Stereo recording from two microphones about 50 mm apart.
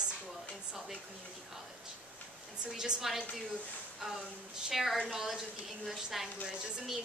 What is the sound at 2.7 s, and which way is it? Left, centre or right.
A woman's voice, centre.